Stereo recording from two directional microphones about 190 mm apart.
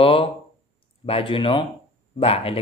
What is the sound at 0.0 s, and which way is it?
Speech, 30° left (ahead or behind).